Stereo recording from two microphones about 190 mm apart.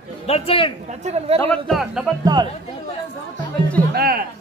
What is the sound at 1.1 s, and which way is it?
Speech, 35° right (ahead or behind).